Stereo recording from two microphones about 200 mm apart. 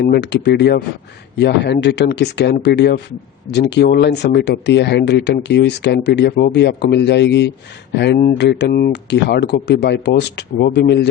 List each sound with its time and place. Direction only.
0.0 s speech: 55° left (ahead or behind)